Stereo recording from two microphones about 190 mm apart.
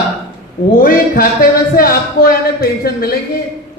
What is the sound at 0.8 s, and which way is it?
Speech, 50° left (ahead or behind).